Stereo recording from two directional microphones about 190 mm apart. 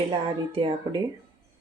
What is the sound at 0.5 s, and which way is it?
Speech, 30° right (ahead or behind).